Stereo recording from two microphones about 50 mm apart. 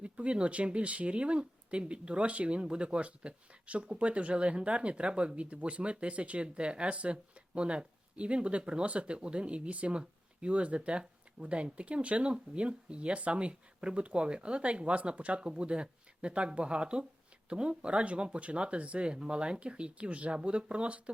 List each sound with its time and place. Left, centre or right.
0.0 s speech: right